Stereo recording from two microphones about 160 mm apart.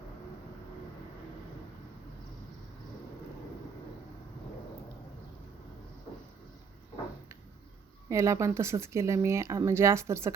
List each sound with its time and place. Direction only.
8.1 s speech: 20° right (ahead or behind)